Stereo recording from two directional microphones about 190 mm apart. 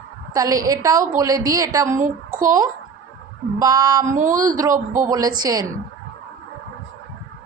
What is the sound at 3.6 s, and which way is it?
A woman's voice, 20° right (ahead or behind).